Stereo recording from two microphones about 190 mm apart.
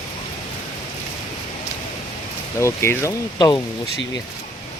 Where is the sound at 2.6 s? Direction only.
15° left (ahead or behind).